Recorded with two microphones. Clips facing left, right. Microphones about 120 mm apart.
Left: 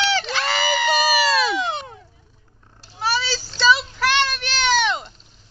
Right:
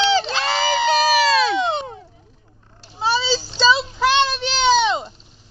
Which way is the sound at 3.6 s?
20° right (ahead or behind).